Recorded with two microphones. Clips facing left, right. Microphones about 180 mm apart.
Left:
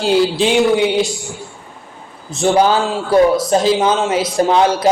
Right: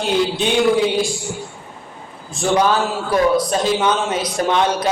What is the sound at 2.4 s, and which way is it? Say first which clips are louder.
A man's voice: left 3 dB; 30° left (ahead or behind).